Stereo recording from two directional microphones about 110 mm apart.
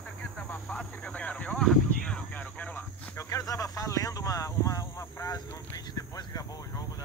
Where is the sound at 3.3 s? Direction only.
30° left (ahead or behind).